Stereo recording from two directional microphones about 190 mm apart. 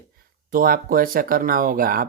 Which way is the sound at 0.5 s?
50° right (ahead or behind).